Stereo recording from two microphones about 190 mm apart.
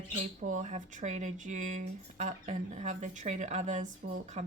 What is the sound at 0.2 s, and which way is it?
Speech, 40° right (ahead or behind).